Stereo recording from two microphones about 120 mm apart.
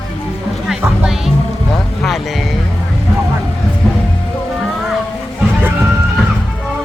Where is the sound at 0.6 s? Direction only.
5° right (ahead or behind).